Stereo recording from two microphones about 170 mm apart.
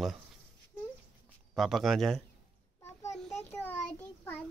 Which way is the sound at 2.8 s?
20° left (ahead or behind).